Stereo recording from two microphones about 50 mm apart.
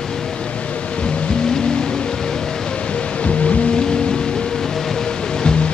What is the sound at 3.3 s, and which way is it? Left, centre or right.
Music, left.